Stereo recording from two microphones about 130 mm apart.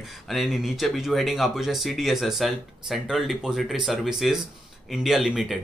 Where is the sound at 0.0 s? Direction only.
Centre (ahead or behind).